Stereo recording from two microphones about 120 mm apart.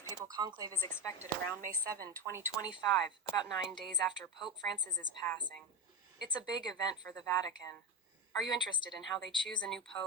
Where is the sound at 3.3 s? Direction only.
35° left (ahead or behind).